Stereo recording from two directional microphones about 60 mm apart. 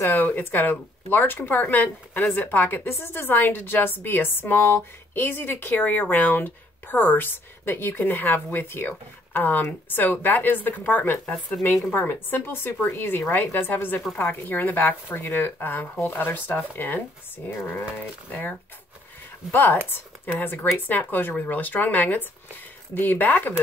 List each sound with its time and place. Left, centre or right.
0.0 s speech: left